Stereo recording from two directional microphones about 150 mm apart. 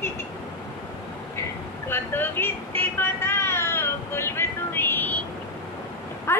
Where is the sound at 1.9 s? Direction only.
15° left (ahead or behind).